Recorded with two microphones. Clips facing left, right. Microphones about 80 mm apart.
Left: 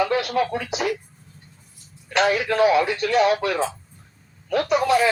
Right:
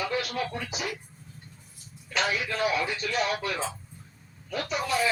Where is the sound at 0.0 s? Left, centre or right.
Left.